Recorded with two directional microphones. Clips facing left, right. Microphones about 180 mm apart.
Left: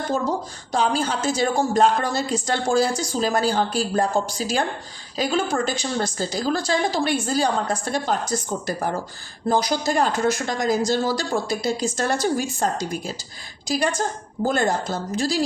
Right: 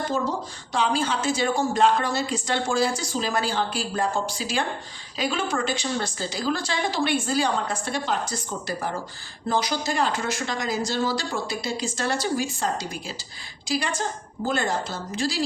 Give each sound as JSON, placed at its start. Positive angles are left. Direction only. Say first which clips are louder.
{"t": 0.7, "sound": "a woman's voice", "louder": "left 2 dB", "side_deg": 40}